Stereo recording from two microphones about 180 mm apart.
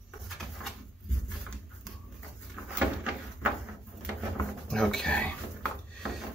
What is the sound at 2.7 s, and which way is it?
Door, 5° right (ahead or behind).